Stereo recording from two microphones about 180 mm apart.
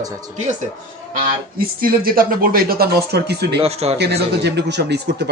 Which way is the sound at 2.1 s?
50° right (ahead or behind).